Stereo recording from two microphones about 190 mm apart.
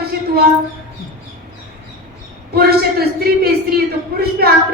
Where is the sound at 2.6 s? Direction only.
55° right (ahead or behind).